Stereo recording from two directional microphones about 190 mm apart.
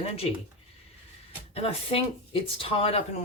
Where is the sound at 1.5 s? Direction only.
30° left (ahead or behind).